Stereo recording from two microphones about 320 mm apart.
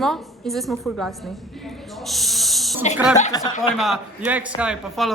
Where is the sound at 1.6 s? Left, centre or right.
Centre.